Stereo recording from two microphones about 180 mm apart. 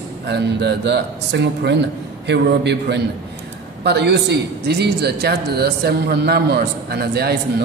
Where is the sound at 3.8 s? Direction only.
70° right (ahead or behind).